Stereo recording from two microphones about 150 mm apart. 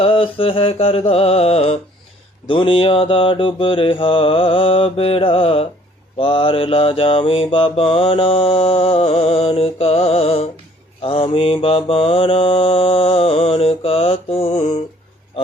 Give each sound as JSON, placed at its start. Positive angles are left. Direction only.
{"t": 0.0, "sound": "mantra", "side_deg": 40}